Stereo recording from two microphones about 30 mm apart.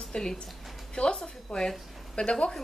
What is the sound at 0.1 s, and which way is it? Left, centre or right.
Speech, left.